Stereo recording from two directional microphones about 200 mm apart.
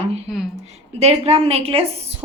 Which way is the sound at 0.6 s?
30° right (ahead or behind).